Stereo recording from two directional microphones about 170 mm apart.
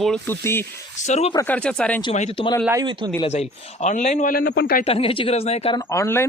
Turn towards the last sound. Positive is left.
turn(degrees=15)  # may be behind; listen again after turning